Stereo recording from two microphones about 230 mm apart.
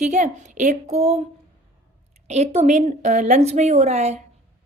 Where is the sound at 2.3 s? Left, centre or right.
Right.